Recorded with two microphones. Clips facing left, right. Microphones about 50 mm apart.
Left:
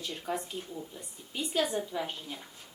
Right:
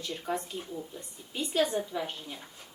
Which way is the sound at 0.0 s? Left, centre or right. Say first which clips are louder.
Right 1 dB; centre.